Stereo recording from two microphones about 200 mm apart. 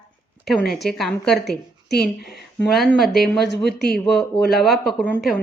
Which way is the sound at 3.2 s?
55° left (ahead or behind).